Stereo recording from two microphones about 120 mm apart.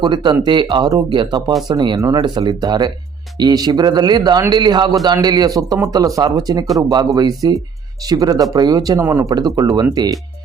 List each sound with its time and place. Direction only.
0.0 s a man's voice: 40° right (ahead or behind)